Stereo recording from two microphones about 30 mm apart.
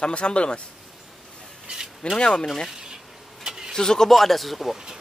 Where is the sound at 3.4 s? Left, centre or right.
Right.